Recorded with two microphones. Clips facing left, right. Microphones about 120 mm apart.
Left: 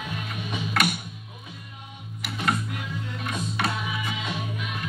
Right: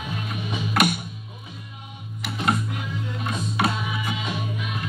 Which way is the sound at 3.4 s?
15° right (ahead or behind).